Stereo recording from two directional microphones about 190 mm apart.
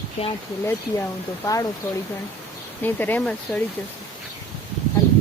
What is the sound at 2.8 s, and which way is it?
Speech, 10° left (ahead or behind).